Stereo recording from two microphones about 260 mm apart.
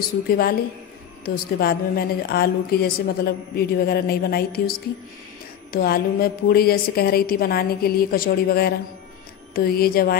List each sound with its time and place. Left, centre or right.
0.3 s a woman's voice: left